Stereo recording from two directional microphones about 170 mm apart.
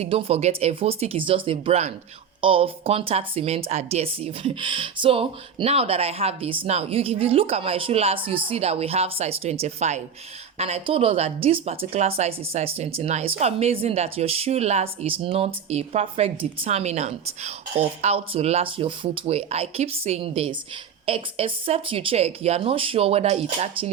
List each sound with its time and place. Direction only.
0.0 s a woman's voice: 35° right (ahead or behind)